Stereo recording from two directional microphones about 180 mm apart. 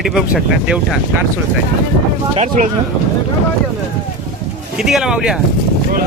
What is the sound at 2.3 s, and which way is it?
Speech, 40° right (ahead or behind).